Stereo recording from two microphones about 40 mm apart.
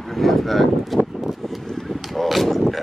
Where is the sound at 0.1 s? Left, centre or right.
Centre.